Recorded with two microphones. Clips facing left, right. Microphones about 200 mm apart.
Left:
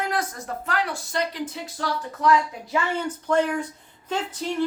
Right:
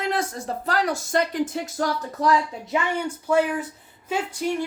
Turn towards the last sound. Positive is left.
turn(degrees=-10)  # may be behind; listen again after turning